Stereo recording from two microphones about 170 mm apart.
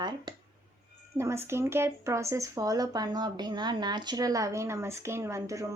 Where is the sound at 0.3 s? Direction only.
25° right (ahead or behind).